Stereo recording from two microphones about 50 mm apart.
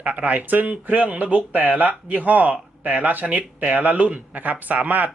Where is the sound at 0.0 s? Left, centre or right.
Right.